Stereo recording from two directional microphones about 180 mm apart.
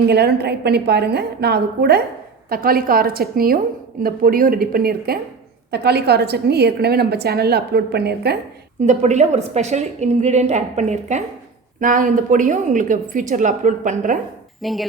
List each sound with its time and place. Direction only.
0.1 s a woman's voice: 65° right (ahead or behind)
8.9 s a woman's voice: 40° right (ahead or behind)
14.6 s speech: centre (ahead or behind)